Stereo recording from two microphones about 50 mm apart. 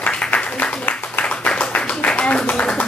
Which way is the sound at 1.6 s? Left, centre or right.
Left.